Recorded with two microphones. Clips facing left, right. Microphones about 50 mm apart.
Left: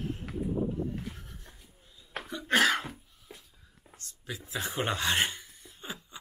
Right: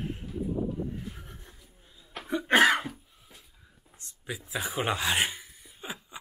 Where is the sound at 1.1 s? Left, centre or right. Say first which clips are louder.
Right 2 dB; right.